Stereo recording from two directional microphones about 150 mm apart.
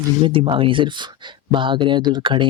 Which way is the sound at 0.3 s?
35° right (ahead or behind).